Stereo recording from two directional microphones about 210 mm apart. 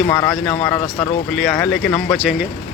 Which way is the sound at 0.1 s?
10° left (ahead or behind).